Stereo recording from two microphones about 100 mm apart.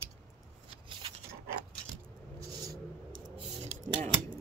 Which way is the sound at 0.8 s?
65° right (ahead or behind).